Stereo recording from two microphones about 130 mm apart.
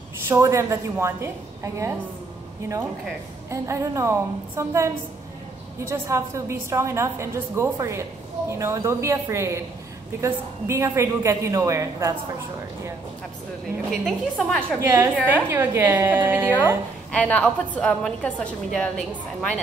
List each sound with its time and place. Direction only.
0.3 s a woman's voice: 20° right (ahead or behind)
3.4 s a woman's voice: 20° right (ahead or behind)
14.0 s a woman's voice: 5° left (ahead or behind)
14.9 s a woman's voice: 15° right (ahead or behind)
17.1 s a woman's voice: 10° left (ahead or behind)